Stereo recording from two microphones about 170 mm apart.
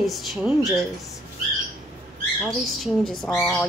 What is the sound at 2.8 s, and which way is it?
Speech, centre (ahead or behind).